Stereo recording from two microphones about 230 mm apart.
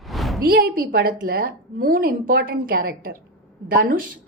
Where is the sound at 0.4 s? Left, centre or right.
Right.